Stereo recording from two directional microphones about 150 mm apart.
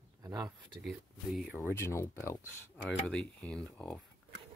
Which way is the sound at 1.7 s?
20° left (ahead or behind).